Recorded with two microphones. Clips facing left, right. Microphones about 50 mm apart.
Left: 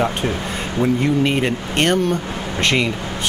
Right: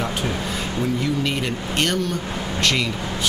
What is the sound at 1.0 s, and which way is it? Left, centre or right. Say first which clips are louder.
Speech: left 6 dB; left.